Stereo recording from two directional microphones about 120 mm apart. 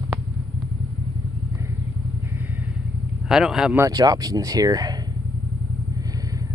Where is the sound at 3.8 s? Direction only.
30° right (ahead or behind).